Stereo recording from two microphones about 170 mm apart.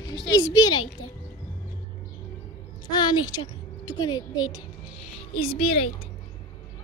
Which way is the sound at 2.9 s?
25° left (ahead or behind).